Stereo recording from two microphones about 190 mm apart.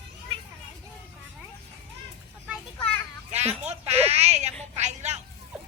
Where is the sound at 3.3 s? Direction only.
35° right (ahead or behind).